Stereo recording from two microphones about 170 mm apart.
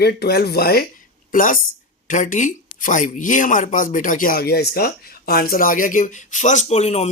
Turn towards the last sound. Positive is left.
turn(degrees=40)  # may be behind; listen again after turning